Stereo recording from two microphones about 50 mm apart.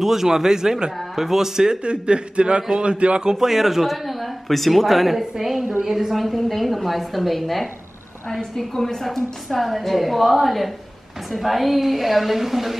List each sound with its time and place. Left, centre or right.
0.0 s a man's voice: centre
3.3 s a woman's voice: centre